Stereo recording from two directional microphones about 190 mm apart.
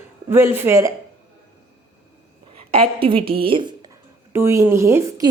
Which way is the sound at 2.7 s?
30° right (ahead or behind).